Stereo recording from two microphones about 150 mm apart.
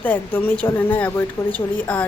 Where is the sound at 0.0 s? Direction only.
10° left (ahead or behind).